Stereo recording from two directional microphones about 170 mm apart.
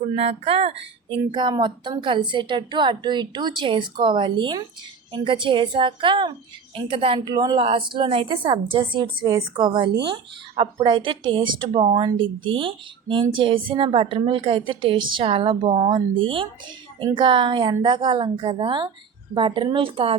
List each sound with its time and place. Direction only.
0.2 s a woman's voice: 35° right (ahead or behind)